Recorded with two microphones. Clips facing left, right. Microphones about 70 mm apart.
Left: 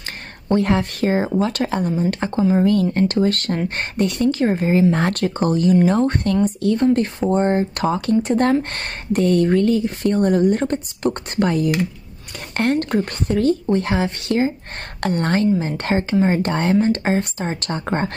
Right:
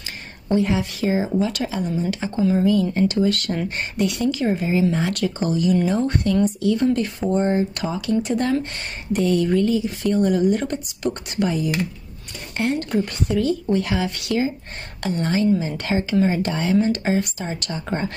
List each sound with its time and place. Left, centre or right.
0.5 s speech: left
15.0 s speech: left